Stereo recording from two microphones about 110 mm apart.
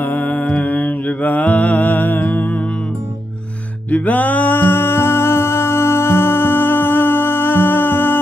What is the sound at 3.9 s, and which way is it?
Music, 15° left (ahead or behind).